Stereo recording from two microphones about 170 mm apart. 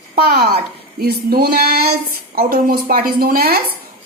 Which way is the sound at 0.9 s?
65° right (ahead or behind).